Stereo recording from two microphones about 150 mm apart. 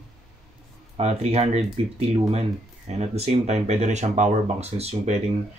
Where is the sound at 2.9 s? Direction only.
45° right (ahead or behind).